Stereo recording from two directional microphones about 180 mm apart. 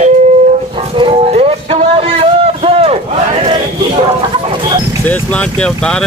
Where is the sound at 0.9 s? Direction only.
30° right (ahead or behind).